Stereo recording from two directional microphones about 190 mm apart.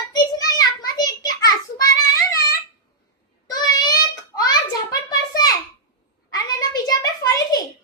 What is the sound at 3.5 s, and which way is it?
Child singing, 20° left (ahead or behind).